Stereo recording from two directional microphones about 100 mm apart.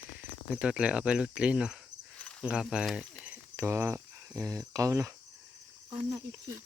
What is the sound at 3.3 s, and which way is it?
Speech, 25° right (ahead or behind).